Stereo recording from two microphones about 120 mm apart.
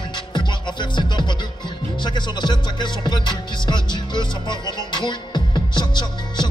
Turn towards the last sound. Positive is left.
turn(degrees=40)  # may be behind; listen again after turning